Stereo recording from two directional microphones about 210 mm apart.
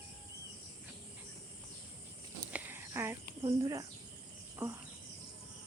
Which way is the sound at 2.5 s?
10° right (ahead or behind).